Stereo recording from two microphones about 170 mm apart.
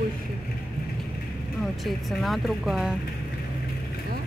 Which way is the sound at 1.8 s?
Centre (ahead or behind).